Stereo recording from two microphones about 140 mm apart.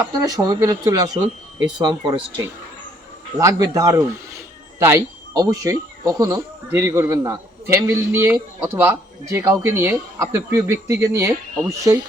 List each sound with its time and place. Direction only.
0.0 s a man's voice: 25° right (ahead or behind)
3.3 s a man's voice: 25° right (ahead or behind)
5.4 s a man's voice: 25° right (ahead or behind)